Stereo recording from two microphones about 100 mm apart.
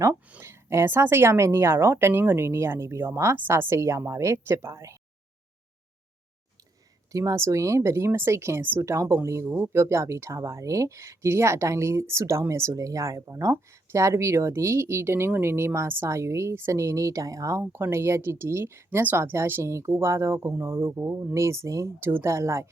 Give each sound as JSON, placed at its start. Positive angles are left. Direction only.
{"t": 0.4, "sound": "speech", "side_deg": -25}
{"t": 7.1, "sound": "speech", "side_deg": -35}